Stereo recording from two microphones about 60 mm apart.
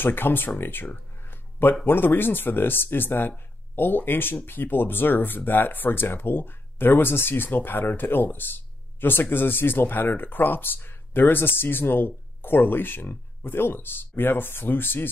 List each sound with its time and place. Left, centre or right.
0.0 s speech: left
1.2 s a sound: left
1.9 s speech: left